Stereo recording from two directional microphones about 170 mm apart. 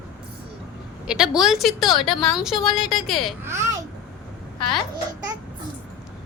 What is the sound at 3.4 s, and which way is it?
Speech, 15° right (ahead or behind).